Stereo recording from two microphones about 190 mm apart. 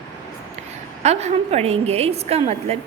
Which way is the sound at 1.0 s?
35° right (ahead or behind).